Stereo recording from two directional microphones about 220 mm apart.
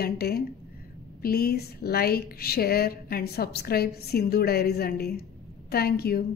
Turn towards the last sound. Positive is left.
turn(degrees=45)  # may be behind; listen again after turning